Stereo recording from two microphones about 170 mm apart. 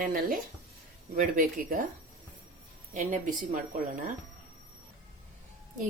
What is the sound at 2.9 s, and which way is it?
Speech, 50° right (ahead or behind).